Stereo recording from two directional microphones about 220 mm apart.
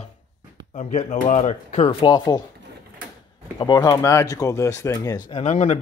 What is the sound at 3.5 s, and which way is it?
Speech, 20° left (ahead or behind).